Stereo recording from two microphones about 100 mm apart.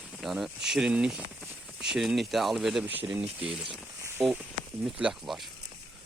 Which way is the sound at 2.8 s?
20° right (ahead or behind).